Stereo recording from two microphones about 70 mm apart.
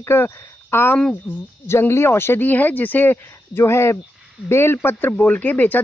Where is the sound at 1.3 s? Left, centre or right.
Centre.